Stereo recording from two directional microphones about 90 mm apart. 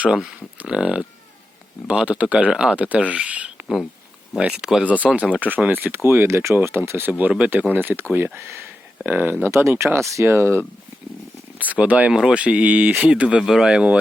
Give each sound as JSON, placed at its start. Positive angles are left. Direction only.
{"t": 0.0, "sound": "speech", "side_deg": -10}
{"t": 11.6, "sound": "speech", "side_deg": -15}